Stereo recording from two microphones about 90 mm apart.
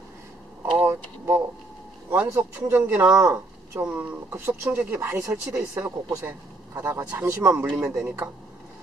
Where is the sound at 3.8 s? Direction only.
20° right (ahead or behind).